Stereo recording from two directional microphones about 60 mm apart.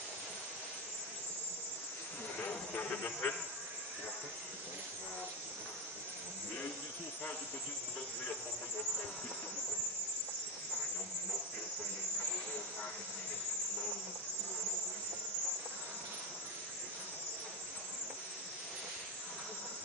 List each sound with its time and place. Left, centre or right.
2.7 s speech: left